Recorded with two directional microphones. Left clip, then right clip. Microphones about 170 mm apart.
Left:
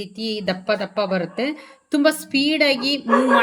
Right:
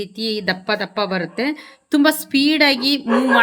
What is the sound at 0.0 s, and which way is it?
Speech, 35° right (ahead or behind).